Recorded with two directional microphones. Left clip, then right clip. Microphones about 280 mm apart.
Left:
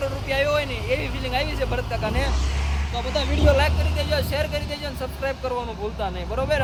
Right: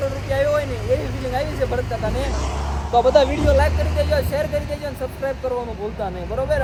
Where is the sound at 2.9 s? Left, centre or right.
Centre.